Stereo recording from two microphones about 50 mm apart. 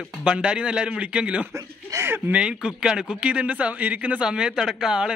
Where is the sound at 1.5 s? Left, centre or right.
Right.